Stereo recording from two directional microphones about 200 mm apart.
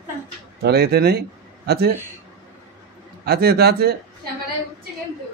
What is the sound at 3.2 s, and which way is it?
Speech, 50° right (ahead or behind).